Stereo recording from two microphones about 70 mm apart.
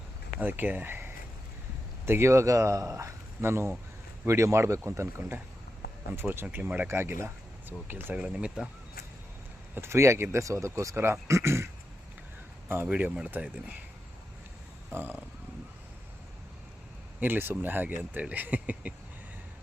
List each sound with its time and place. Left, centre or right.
0.3 s speech: right
6.3 s speech: right
6.8 s speech: right
8.3 s speech: centre
9.7 s speech: right
14.8 s speech: right
17.2 s speech: right